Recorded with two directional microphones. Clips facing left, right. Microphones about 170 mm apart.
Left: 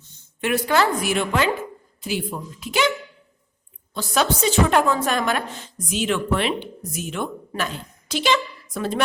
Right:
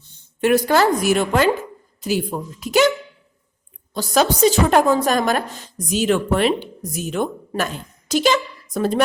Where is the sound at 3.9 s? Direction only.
40° right (ahead or behind).